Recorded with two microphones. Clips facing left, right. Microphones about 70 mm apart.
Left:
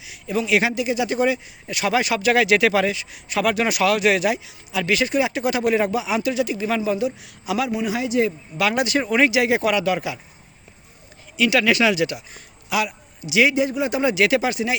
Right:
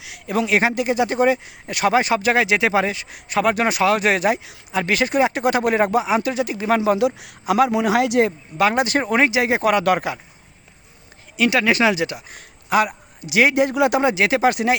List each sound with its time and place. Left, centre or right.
0.0 s speech: right
2.9 s speech: right
7.7 s speech: right
8.5 s speech: right
11.3 s speech: right
12.3 s a man's voice: right
13.7 s speech: right
14.0 s speech: right
14.5 s speech: right